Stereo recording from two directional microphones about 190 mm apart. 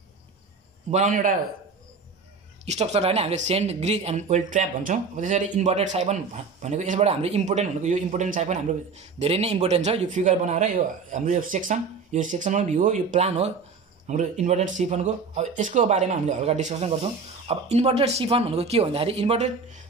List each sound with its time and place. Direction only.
0.8 s a man's voice: 40° right (ahead or behind)
2.6 s speech: 35° right (ahead or behind)